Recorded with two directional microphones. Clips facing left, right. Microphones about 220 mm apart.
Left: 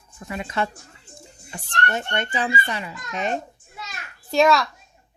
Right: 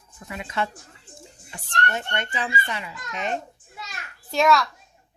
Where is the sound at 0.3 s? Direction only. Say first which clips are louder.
Left 2 dB; 40° left (ahead or behind).